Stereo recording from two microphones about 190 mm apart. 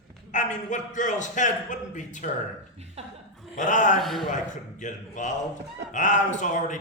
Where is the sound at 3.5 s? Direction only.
40° left (ahead or behind).